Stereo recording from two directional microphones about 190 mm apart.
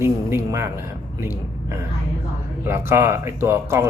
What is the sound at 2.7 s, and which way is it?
Speech, 15° right (ahead or behind).